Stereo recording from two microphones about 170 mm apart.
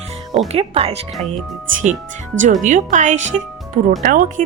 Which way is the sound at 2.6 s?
50° right (ahead or behind).